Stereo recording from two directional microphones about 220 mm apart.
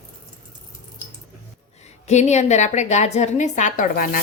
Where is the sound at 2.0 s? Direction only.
30° left (ahead or behind).